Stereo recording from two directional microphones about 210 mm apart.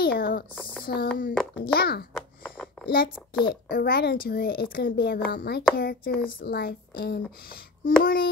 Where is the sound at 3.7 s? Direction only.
45° left (ahead or behind).